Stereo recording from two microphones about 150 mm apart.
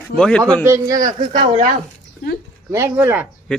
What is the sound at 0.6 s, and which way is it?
Speech, 20° right (ahead or behind).